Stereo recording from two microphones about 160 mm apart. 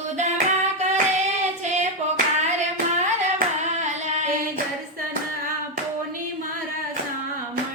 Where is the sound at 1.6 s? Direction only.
45° right (ahead or behind).